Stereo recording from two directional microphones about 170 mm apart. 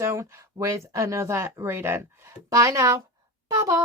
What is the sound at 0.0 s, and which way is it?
Speech, 15° right (ahead or behind).